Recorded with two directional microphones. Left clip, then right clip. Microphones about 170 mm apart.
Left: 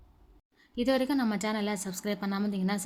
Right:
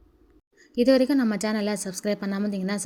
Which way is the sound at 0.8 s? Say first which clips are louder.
Right 8 dB; 20° right (ahead or behind).